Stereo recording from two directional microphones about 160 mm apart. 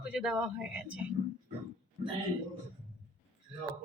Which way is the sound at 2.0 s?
40° right (ahead or behind).